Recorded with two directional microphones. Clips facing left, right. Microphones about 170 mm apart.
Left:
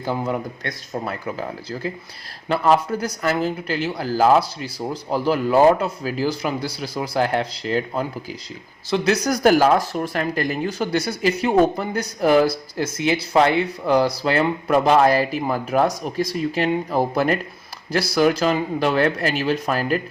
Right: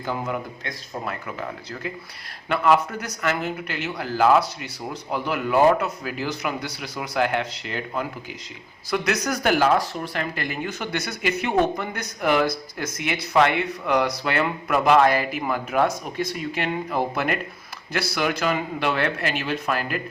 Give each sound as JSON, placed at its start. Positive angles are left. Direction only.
{"t": 0.0, "sound": "speech", "side_deg": 35}